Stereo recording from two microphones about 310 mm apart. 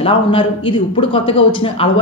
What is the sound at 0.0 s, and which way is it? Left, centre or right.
A woman's voice, centre.